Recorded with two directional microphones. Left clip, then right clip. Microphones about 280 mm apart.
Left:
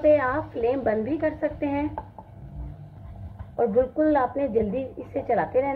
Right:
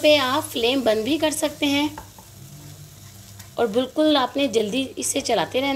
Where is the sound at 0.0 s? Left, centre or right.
Right.